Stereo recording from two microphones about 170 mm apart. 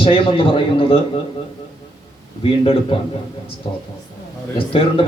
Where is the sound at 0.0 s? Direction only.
35° left (ahead or behind).